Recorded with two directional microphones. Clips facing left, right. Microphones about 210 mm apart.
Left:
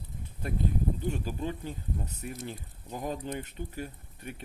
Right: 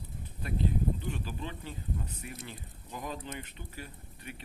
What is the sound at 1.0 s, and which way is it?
Speech, 45° left (ahead or behind).